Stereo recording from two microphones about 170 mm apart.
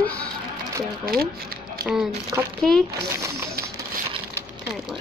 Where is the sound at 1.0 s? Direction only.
60° right (ahead or behind).